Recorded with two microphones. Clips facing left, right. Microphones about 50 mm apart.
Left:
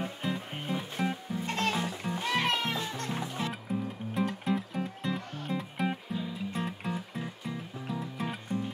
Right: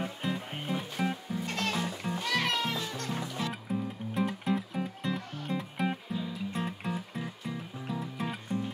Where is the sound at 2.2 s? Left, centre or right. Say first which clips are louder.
Left 1 dB; left.